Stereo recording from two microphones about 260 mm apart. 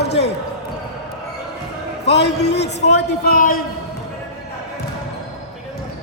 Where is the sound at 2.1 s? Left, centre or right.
Left.